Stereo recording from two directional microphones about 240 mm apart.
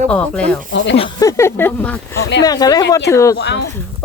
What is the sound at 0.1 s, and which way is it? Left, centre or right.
Speech, centre.